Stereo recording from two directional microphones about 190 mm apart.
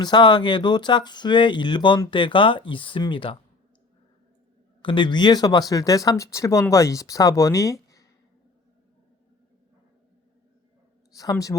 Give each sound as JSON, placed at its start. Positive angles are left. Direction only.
{"t": 0.0, "sound": "speech", "side_deg": 25}
{"t": 4.8, "sound": "speech", "side_deg": 25}
{"t": 11.1, "sound": "a woman's voice", "side_deg": 20}